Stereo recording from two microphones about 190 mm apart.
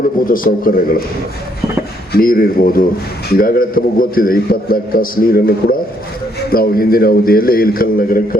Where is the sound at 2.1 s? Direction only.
50° left (ahead or behind).